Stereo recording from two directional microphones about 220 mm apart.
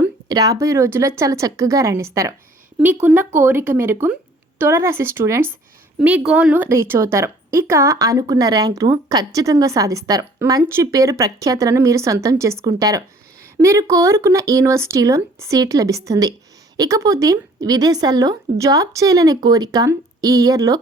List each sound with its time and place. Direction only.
0.3 s a woman's voice: 15° right (ahead or behind)